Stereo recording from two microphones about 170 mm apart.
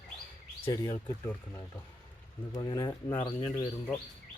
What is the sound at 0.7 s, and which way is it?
Speech, 20° left (ahead or behind).